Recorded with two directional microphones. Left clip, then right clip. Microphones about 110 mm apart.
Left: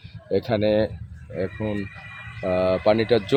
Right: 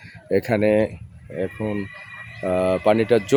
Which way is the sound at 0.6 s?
85° right.